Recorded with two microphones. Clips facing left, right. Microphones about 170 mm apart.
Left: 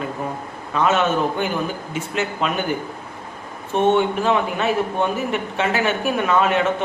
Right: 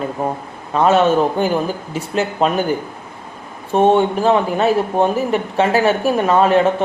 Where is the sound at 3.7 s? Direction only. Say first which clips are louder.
Right 4 dB; 35° right (ahead or behind).